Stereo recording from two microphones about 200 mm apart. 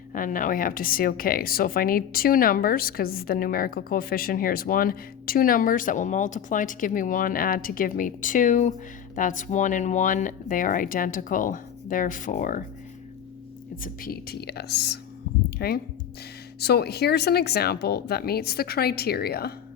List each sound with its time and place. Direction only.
0.1 s speech: 40° left (ahead or behind)
13.8 s speech: 50° left (ahead or behind)